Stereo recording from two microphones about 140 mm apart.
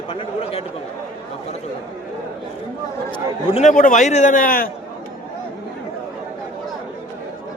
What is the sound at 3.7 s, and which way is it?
Speech, 70° left (ahead or behind).